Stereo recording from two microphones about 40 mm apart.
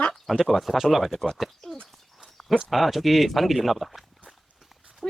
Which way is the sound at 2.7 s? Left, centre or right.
Centre.